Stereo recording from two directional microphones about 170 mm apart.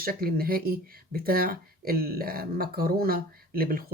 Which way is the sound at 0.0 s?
60° right (ahead or behind).